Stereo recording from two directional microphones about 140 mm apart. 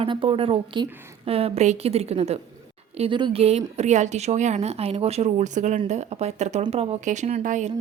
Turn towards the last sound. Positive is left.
turn(degrees=-60)  # may be behind; listen again after turning